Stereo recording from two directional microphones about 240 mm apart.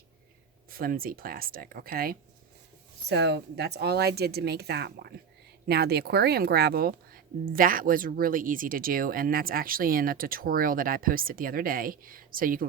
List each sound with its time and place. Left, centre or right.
0.7 s speech: right